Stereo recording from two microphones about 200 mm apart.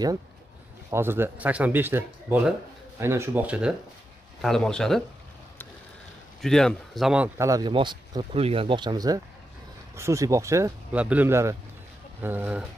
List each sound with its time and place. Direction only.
0.8 s speech: 10° right (ahead or behind)
6.4 s speech: centre (ahead or behind)
7.3 s speech: 15° right (ahead or behind)